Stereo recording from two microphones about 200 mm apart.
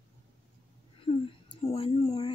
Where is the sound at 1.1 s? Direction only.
25° left (ahead or behind).